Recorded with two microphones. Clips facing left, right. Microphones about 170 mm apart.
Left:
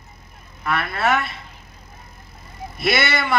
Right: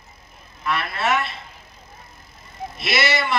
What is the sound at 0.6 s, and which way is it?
Speech, 55° left (ahead or behind).